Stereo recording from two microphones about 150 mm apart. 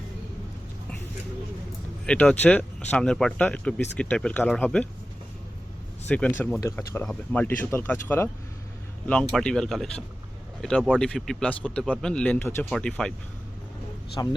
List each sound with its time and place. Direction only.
2.0 s speech: 5° left (ahead or behind)
6.1 s speech: 10° left (ahead or behind)
14.2 s speech: 25° left (ahead or behind)